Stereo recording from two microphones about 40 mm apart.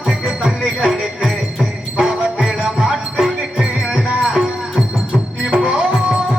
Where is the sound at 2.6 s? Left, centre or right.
Centre.